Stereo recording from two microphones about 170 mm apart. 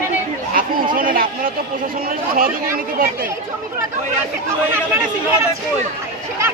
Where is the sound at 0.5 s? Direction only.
55° right (ahead or behind).